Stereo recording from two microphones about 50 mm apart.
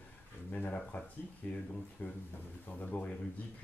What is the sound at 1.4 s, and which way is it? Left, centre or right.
Speech, left.